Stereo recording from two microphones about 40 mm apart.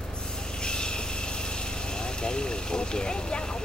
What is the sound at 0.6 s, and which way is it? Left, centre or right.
Vehicle, left.